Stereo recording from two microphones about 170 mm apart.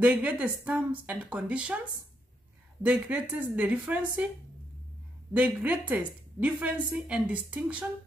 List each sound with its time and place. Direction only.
0.0 s speech: 10° right (ahead or behind)
2.8 s speech: 10° right (ahead or behind)
5.3 s speech: 10° right (ahead or behind)